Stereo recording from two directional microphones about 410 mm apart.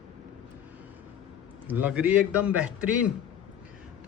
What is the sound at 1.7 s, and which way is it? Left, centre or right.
Speech, centre.